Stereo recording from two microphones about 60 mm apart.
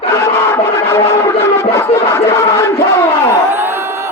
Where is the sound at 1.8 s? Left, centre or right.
Left.